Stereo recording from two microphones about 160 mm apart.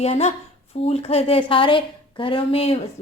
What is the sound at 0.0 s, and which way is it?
A woman's voice, 40° left (ahead or behind).